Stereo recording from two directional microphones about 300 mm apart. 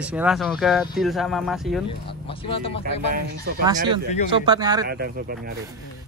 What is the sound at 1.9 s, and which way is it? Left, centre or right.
Speech, centre.